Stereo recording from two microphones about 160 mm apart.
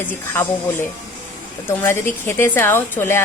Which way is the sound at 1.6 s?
15° left (ahead or behind).